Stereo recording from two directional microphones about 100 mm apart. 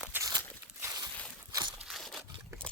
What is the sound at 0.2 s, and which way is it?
Walk, 40° right (ahead or behind).